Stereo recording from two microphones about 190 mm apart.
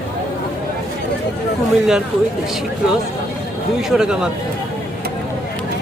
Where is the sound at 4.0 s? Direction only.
5° right (ahead or behind).